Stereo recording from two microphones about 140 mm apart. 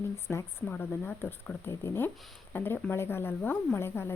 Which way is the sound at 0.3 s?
15° left (ahead or behind).